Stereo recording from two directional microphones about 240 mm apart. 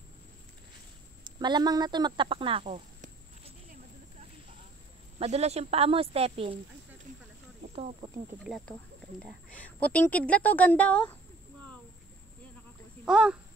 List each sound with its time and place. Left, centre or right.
1.2 s speech: centre
5.2 s speech: right
7.7 s speech: right
9.2 s a woman's voice: centre
13.0 s a woman's voice: centre